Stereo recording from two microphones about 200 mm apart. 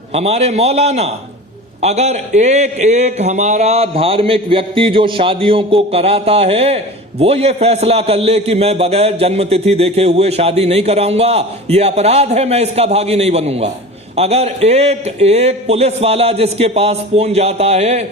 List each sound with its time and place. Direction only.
0.1 s a man's voice: 30° right (ahead or behind)